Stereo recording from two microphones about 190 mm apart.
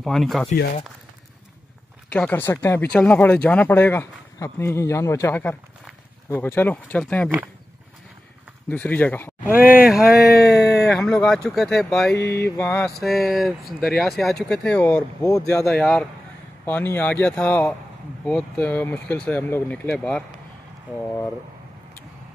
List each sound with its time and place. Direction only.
0.0 s speech: centre (ahead or behind)
2.1 s speech: 10° left (ahead or behind)
8.6 s speech: 10° left (ahead or behind)
9.7 s speech: 5° right (ahead or behind)
12.3 s speech: 15° left (ahead or behind)
13.0 s speech: centre (ahead or behind)
15.2 s speech: 15° left (ahead or behind)
15.7 s speech: 5° left (ahead or behind)